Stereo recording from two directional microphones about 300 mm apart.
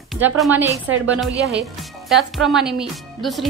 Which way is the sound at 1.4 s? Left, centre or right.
Centre.